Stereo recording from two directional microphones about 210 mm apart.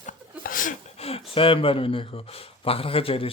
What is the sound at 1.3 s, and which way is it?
Speech, 25° left (ahead or behind).